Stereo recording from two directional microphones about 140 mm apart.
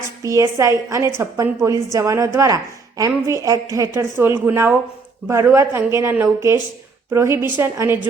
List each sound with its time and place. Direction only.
0.2 s a woman's voice: 20° right (ahead or behind)